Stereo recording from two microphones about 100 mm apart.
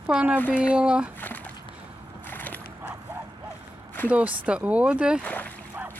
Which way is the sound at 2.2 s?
20° left (ahead or behind).